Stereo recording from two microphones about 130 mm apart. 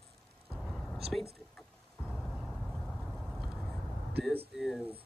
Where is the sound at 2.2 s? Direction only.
5° left (ahead or behind).